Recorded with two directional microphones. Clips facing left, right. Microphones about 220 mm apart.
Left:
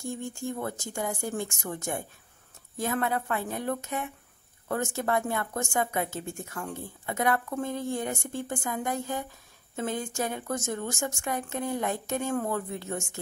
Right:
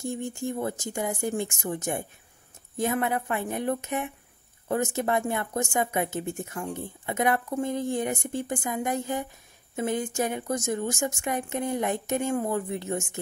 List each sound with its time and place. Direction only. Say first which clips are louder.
0.0 s a woman's voice: right 3 dB; 20° right (ahead or behind)